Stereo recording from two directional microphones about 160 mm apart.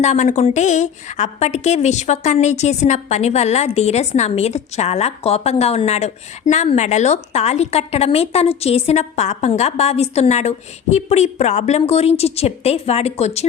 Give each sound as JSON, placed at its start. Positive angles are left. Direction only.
{"t": 0.0, "sound": "a woman's voice", "side_deg": 45}